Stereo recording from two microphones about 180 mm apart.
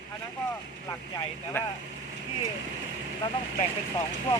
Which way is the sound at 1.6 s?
10° left (ahead or behind).